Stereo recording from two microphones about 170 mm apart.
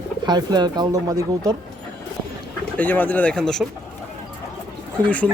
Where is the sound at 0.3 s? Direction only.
25° right (ahead or behind).